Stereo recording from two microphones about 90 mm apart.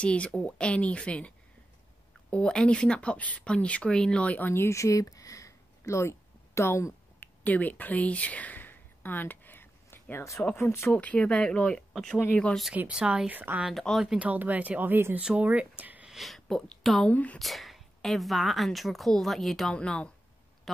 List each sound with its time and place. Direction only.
0.0 s speech: 15° left (ahead or behind)
2.3 s speech: 10° left (ahead or behind); by 7.2 s 30° left (ahead or behind)
7.4 s a woman's voice: 20° left (ahead or behind)
10.9 s speech: 15° left (ahead or behind)
12.7 s speech: 10° right (ahead or behind)
13.3 s speech: 20° right (ahead or behind)
13.7 s speech: centre (ahead or behind)
14.1 s speech: 15° right (ahead or behind)
16.1 s speech: centre (ahead or behind)
17.1 s speech: 15° left (ahead or behind)
17.4 s speech: centre (ahead or behind)